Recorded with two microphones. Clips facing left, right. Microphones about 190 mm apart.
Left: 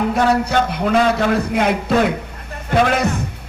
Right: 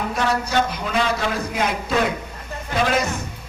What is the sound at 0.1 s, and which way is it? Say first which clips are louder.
A man's voice: left 6 dB; 60° left (ahead or behind).